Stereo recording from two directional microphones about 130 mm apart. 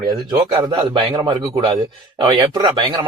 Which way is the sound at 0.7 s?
35° right (ahead or behind).